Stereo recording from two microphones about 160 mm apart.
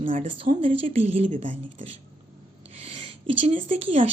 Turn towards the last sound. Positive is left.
turn(degrees=-35)  # may be behind; listen again after turning